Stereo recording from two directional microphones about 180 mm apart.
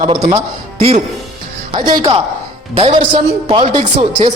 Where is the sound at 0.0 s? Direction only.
30° right (ahead or behind).